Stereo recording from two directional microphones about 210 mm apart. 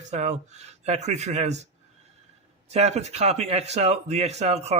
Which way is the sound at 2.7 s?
30° right (ahead or behind).